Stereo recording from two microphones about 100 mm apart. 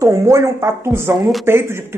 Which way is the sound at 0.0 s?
30° right (ahead or behind).